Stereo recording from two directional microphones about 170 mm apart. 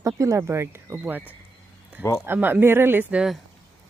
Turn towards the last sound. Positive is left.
turn(degrees=-5)  # may be behind; listen again after turning